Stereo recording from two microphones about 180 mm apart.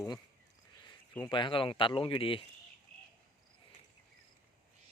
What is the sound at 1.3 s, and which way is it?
Speech, 25° left (ahead or behind).